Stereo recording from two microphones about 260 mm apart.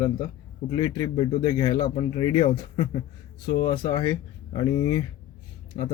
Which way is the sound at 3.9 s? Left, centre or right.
Centre.